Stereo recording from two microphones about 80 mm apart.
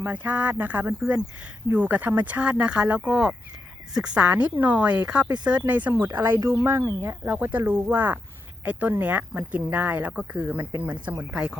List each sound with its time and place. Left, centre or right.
0.0 s speech: centre
11.3 s speech: centre